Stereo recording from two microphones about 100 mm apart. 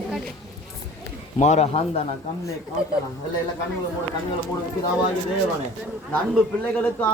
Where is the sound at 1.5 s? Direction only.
90° left.